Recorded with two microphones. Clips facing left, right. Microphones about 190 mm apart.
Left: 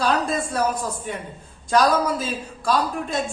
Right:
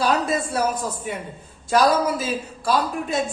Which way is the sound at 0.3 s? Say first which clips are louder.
Even; 5° right (ahead or behind).